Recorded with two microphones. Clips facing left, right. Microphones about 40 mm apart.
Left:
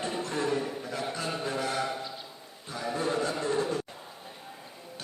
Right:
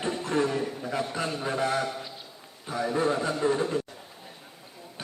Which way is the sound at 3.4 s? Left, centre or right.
Centre.